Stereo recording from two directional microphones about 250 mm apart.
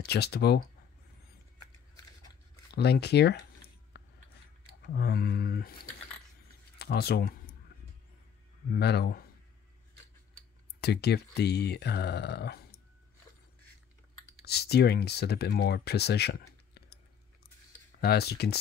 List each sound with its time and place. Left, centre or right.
0.0 s speech: left
2.7 s a sound: left
4.8 s speech: left
6.8 s a sound: left
8.6 s speech: left
10.8 s speech: left
14.4 s speech: left
18.0 s speech: left